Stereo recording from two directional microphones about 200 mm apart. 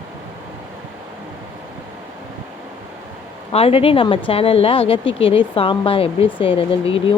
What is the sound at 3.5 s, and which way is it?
Speech, 30° left (ahead or behind).